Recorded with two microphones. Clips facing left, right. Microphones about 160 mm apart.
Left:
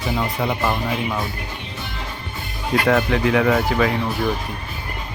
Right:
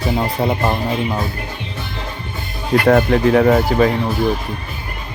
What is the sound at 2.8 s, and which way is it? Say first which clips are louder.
Speech: right 6 dB; 40° right (ahead or behind).